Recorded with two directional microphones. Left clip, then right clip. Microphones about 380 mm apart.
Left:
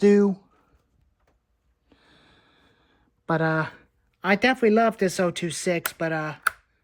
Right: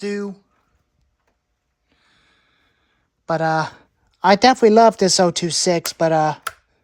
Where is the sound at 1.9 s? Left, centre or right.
Centre.